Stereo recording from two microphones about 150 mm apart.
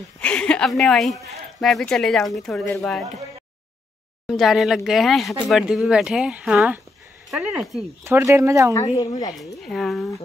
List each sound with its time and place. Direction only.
0.2 s speech: 10° left (ahead or behind)
4.3 s speech: centre (ahead or behind)
8.0 s speech: 15° right (ahead or behind)
9.7 s speech: centre (ahead or behind)